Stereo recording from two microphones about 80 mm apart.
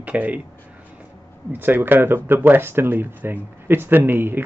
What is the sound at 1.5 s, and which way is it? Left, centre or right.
Speech, right.